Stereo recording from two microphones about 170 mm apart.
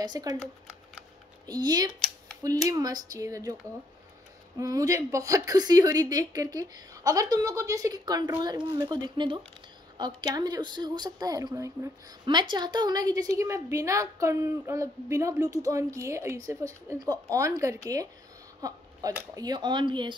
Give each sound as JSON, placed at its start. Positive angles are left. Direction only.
{"t": 0.0, "sound": "a woman's voice", "side_deg": -25}
{"t": 0.4, "sound": "shuffling cards", "side_deg": 0}
{"t": 1.4, "sound": "a woman's voice", "side_deg": -20}
{"t": 4.6, "sound": "a woman's voice", "side_deg": -20}